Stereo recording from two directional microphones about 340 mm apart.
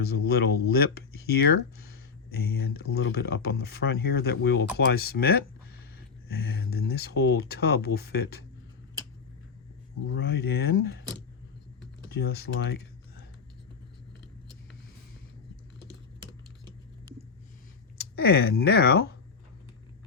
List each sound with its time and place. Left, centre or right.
0.0 s speech: left
10.1 s speech: left
12.1 s speech: left
17.9 s speech: left